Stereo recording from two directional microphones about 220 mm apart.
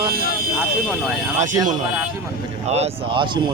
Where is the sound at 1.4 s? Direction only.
35° right (ahead or behind).